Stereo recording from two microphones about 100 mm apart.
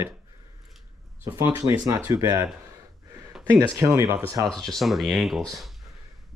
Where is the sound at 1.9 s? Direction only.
30° right (ahead or behind).